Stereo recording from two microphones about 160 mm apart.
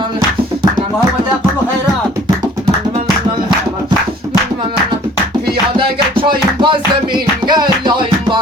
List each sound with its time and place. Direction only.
5.7 s music: 30° right (ahead or behind)